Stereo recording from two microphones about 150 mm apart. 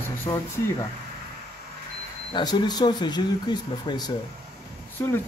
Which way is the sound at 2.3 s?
30° left (ahead or behind).